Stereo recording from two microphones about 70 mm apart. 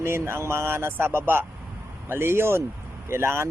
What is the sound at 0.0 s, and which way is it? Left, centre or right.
Speech, right.